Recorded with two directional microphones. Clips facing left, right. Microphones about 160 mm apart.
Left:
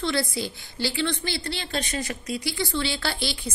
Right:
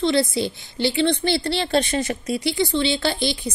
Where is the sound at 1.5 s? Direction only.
70° right (ahead or behind).